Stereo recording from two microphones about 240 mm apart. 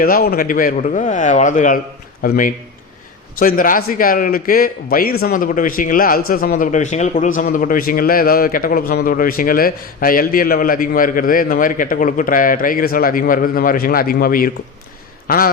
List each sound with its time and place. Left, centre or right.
0.0 s a man's voice: left